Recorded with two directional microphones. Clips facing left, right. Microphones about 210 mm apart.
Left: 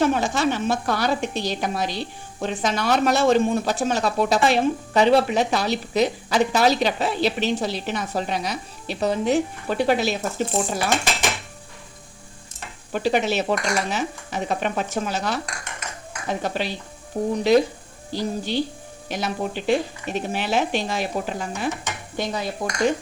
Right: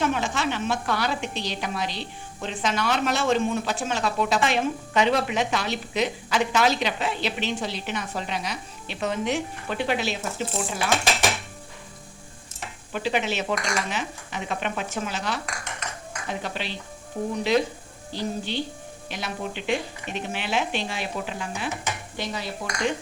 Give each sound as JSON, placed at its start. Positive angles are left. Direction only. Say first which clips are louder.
{"t": 0.0, "sound": "speech", "louder": "left 5 dB", "side_deg": 40}
{"t": 12.9, "sound": "speech", "louder": "left 5 dB", "side_deg": 40}
{"t": 16.4, "sound": "speech", "louder": "left 6 dB", "side_deg": 40}
{"t": 22.2, "sound": "dishes", "louder": "left 6 dB", "side_deg": 45}